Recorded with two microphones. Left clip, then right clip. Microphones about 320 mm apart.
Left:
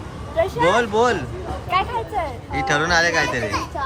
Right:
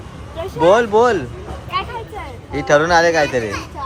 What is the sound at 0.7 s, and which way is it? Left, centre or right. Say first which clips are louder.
Speech: right 5 dB; centre.